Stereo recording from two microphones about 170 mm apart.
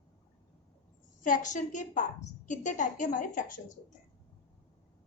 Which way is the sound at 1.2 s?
50° left (ahead or behind).